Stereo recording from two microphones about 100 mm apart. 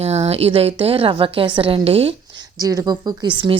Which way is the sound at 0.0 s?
90° right.